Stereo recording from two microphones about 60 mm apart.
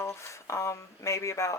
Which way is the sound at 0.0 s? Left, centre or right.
Left.